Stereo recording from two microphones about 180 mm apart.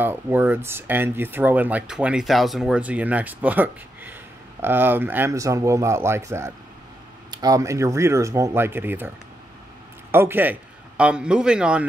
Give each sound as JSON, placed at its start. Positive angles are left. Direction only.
{"t": 0.0, "sound": "speech", "side_deg": -10}
{"t": 10.1, "sound": "a man's voice", "side_deg": -10}